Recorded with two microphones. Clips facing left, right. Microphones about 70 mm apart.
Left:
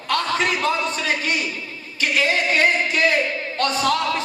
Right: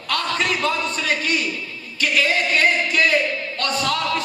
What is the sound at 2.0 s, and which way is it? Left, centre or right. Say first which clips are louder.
A man's voice: even; left.